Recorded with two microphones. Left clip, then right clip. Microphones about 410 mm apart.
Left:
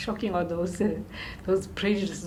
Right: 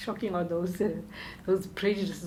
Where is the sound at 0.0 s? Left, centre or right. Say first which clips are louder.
Left 3 dB; right.